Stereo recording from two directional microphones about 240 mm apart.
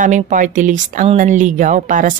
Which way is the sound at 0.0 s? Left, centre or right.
Right.